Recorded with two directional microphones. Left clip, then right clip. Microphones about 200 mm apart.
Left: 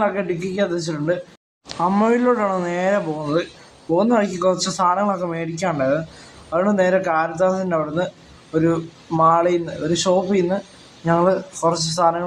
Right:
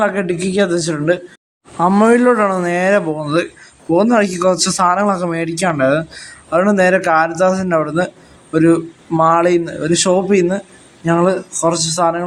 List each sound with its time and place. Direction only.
0.0 s a man's voice: 30° right (ahead or behind)